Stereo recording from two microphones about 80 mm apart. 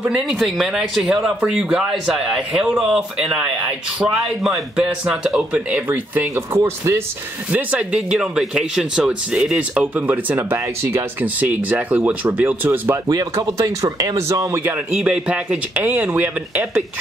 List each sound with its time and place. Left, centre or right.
0.0 s speech: centre
4.1 s speech: centre; by 7.0 s right
7.5 s speech: centre; by 11.2 s right
11.3 s speech: centre
13.1 s speech: right
15.0 s speech: centre